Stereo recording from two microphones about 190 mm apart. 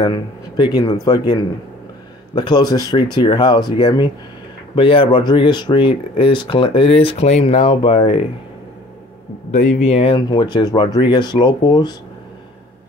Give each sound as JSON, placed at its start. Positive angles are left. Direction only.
{"t": 0.0, "sound": "speech", "side_deg": 25}
{"t": 9.5, "sound": "speech", "side_deg": 35}